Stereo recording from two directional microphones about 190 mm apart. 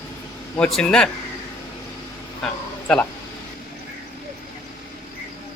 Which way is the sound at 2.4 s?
5° left (ahead or behind).